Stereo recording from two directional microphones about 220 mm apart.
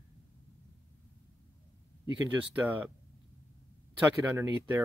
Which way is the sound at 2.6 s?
10° right (ahead or behind).